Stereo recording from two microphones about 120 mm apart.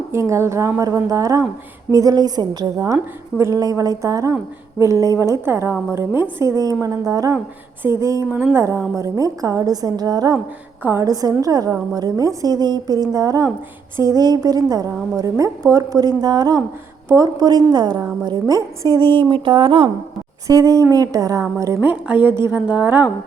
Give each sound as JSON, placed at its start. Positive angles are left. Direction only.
{"t": 0.1, "sound": "a woman's voice", "side_deg": -25}
{"t": 8.3, "sound": "a woman's voice", "side_deg": -15}
{"t": 20.5, "sound": "a woman's voice", "side_deg": -30}
{"t": 21.8, "sound": "speech", "side_deg": -10}